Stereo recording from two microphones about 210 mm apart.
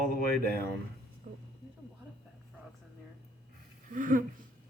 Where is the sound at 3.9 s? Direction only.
40° right (ahead or behind).